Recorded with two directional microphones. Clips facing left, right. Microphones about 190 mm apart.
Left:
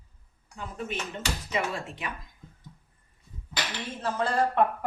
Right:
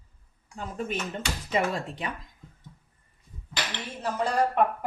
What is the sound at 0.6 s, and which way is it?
Speech, 40° right (ahead or behind).